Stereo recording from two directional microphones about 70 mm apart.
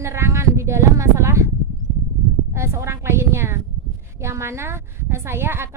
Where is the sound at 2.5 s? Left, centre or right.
Right.